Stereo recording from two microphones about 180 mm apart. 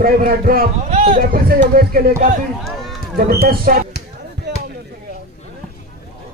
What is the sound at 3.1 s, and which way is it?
Speech, 60° right (ahead or behind).